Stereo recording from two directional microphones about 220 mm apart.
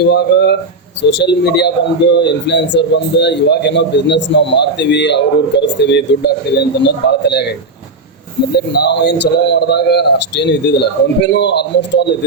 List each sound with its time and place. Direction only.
0.1 s speech: 50° left (ahead or behind)
8.5 s speech: 50° left (ahead or behind)